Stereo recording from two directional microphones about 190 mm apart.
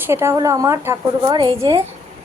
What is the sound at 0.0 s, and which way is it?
A woman's voice, 15° right (ahead or behind).